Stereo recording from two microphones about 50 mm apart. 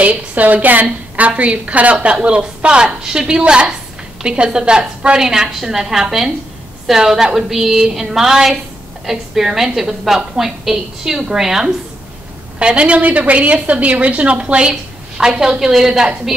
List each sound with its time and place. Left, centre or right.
0.0 s a woman's voice: right; by 11.7 s centre
12.5 s a woman's voice: right